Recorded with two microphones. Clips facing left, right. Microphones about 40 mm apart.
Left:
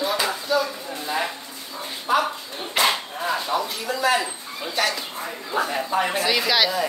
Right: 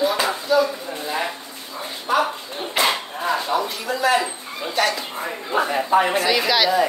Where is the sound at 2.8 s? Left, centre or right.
Centre.